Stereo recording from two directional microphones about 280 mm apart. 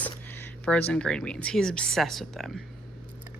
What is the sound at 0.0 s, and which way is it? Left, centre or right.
Speech, centre.